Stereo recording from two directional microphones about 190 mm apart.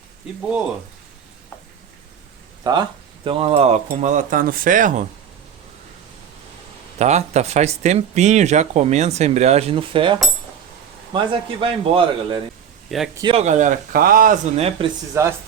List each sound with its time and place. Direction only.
2.7 s a man's voice: 20° right (ahead or behind); by 5.0 s 45° right (ahead or behind)
7.0 s a man's voice: 35° right (ahead or behind)
14.5 s speech: 30° right (ahead or behind)
15.1 s speech: 15° right (ahead or behind)